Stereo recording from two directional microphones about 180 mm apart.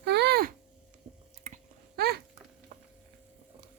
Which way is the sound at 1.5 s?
35° right (ahead or behind).